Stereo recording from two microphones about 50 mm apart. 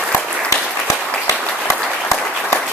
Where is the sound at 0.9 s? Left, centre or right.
Left.